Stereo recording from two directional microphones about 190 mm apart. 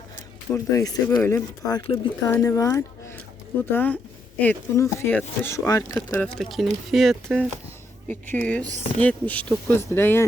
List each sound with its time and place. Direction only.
0.5 s speech: 15° left (ahead or behind)
6.2 s speech: 5° left (ahead or behind)